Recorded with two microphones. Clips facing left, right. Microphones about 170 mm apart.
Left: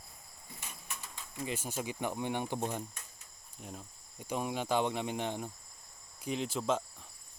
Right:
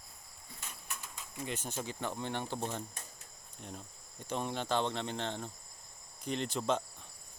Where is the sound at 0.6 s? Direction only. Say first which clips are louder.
Even; 5° left (ahead or behind).